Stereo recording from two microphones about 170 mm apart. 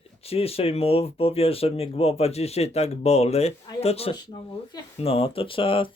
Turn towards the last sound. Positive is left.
turn(degrees=30)  # may be behind; listen again after turning